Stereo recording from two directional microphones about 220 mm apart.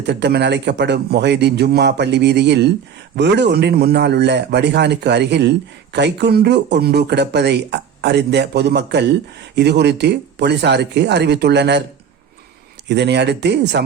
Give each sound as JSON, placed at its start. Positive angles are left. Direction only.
{"t": 0.0, "sound": "a man's voice", "side_deg": -50}
{"t": 12.9, "sound": "a man's voice", "side_deg": -50}